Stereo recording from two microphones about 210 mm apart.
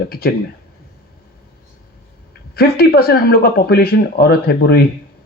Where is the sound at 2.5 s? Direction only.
45° left (ahead or behind).